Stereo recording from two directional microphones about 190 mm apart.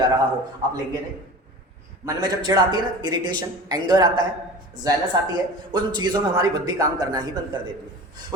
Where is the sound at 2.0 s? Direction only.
20° right (ahead or behind).